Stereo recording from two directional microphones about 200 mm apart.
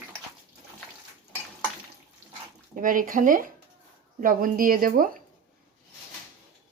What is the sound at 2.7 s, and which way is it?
Speech, 45° right (ahead or behind).